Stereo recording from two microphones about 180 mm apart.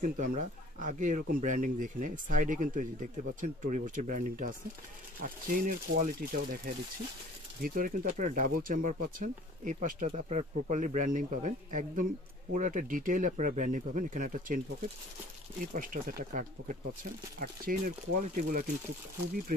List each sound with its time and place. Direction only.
0.0 s speech: 45° right (ahead or behind)
15.6 s speech: 50° right (ahead or behind)